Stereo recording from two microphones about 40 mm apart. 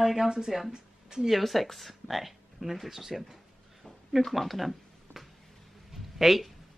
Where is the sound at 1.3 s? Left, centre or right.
Centre.